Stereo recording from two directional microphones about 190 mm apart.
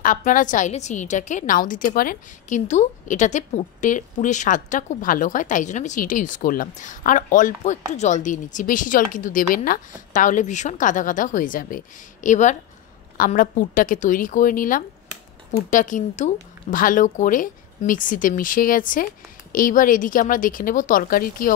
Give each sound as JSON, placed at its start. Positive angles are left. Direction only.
{"t": 0.0, "sound": "a woman's voice", "side_deg": 45}